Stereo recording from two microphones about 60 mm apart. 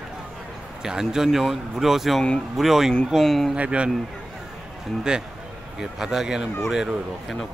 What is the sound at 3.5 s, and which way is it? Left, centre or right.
Speech, centre.